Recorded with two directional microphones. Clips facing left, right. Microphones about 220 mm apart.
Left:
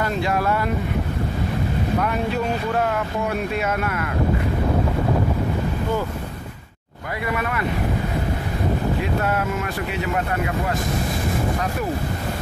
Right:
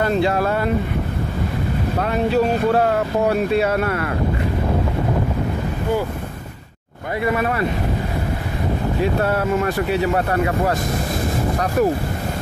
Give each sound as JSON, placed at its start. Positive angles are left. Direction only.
{"t": 0.2, "sound": "speech", "side_deg": -30}
{"t": 2.0, "sound": "speech", "side_deg": -35}